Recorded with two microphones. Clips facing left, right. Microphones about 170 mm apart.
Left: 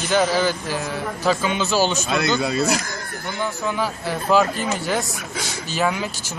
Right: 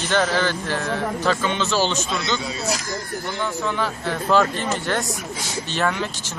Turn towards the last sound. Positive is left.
turn(degrees=10)  # may be behind; listen again after turning